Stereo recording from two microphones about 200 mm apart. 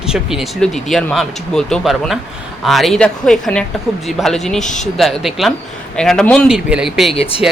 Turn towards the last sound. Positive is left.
turn(degrees=30)  # may be behind; listen again after turning